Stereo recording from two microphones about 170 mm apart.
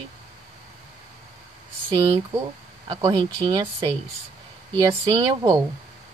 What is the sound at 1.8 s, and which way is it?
Speech, 30° right (ahead or behind).